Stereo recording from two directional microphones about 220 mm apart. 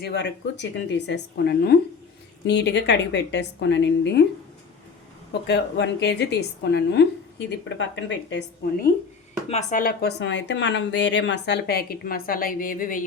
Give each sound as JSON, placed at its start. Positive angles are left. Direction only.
{"t": 0.0, "sound": "a woman's voice", "side_deg": 50}
{"t": 5.3, "sound": "a woman's voice", "side_deg": 50}
{"t": 9.5, "sound": "a woman's voice", "side_deg": 35}